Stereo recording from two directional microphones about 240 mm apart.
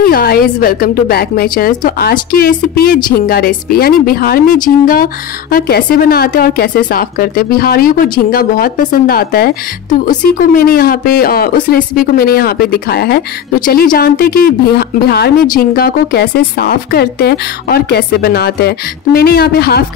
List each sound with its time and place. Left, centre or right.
0.0 s a woman's voice: left